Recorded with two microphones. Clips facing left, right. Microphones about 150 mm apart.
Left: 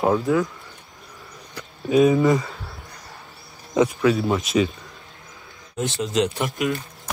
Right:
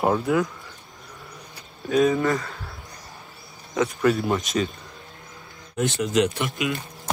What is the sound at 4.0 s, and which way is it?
Speech, centre (ahead or behind).